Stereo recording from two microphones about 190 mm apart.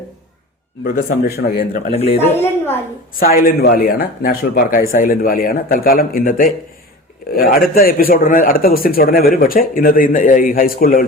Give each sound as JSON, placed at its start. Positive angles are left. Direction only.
{"t": 0.9, "sound": "a man's voice", "side_deg": 45}
{"t": 3.2, "sound": "a man's voice", "side_deg": 50}